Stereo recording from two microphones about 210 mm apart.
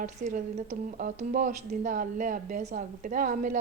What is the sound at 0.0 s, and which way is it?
A woman's voice, 35° right (ahead or behind).